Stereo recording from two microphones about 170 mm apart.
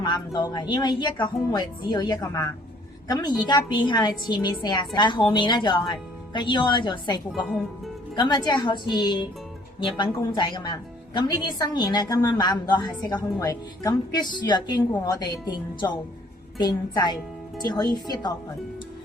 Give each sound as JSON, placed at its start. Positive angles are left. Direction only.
{"t": 0.3, "sound": "a woman's voice", "side_deg": 25}
{"t": 7.3, "sound": "speech", "side_deg": 0}
{"t": 8.1, "sound": "a woman's voice", "side_deg": 25}